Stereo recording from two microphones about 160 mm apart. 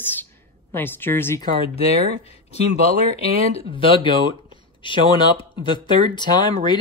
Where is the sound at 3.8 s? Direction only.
30° left (ahead or behind).